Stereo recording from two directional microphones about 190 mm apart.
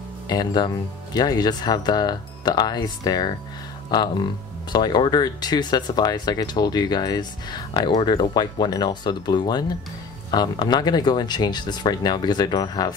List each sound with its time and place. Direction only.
0.3 s speech: 20° left (ahead or behind)